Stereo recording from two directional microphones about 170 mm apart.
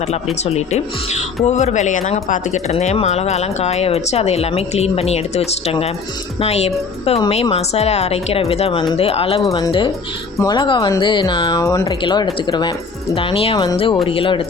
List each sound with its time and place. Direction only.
0.4 s speech: 40° left (ahead or behind)
9.5 s speech: 20° left (ahead or behind)